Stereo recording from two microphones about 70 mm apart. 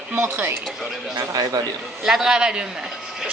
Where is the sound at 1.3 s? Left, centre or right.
Right.